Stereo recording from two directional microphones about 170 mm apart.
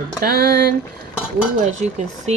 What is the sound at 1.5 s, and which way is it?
Speech, 45° right (ahead or behind).